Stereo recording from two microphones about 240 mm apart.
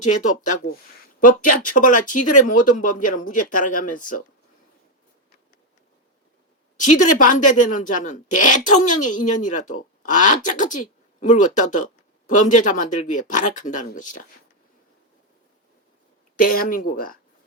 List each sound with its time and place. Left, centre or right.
0.0 s speech: left
6.7 s speech: left
16.4 s speech: left